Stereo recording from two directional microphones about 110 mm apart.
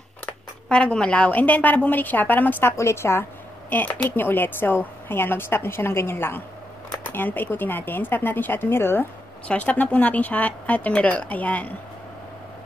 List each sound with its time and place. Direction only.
0.3 s a woman's voice: 10° left (ahead or behind)